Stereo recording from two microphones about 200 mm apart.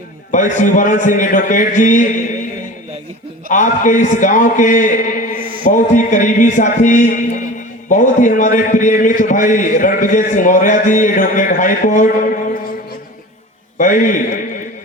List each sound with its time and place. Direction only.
0.3 s a man's voice: 40° left (ahead or behind)
3.5 s a man's voice: 40° left (ahead or behind)
13.7 s a man's voice: 40° left (ahead or behind)